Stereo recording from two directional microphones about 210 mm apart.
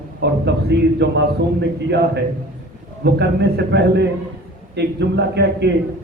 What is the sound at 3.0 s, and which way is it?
A man's voice, 50° right (ahead or behind).